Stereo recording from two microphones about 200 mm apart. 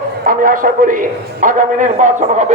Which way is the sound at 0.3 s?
45° right (ahead or behind).